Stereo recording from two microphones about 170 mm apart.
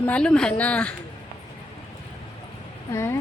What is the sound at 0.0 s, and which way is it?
Speech, 5° left (ahead or behind).